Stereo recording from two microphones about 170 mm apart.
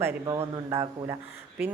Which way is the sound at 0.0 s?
15° right (ahead or behind).